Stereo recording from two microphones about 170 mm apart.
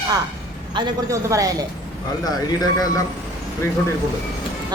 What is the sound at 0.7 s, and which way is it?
Speech, 25° right (ahead or behind).